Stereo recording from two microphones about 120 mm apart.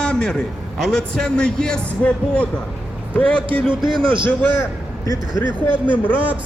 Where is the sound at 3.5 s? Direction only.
45° right (ahead or behind).